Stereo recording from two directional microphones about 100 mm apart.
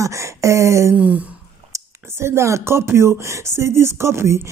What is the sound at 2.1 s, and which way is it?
Speech, 25° right (ahead or behind).